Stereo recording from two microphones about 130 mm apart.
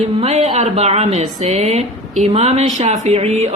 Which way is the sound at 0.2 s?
55° right (ahead or behind).